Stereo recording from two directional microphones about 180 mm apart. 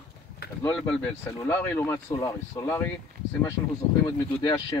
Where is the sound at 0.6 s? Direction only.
10° left (ahead or behind).